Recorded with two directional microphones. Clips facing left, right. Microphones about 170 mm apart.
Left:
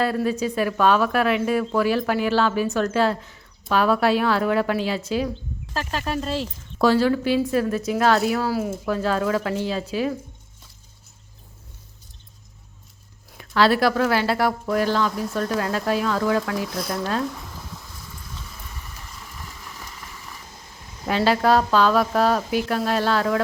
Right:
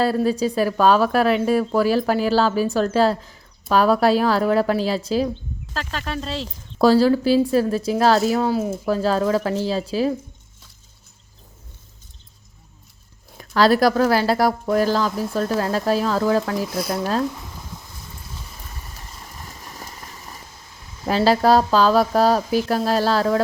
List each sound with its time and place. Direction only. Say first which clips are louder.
0.0 s a woman's voice: right 3 dB; 35° right (ahead or behind)
5.7 s speech: left 2 dB; 5° left (ahead or behind)
6.7 s a woman's voice: right 3 dB; 35° right (ahead or behind)
8.4 s a woman's voice: right 3 dB; 25° right (ahead or behind)
13.3 s a woman's voice: right 2 dB; 40° right (ahead or behind)
17.3 s a sound: even; 10° right (ahead or behind)
19.4 s a sound: right 3 dB; 40° right (ahead or behind)
21.1 s a woman's voice: right 3 dB; 35° right (ahead or behind)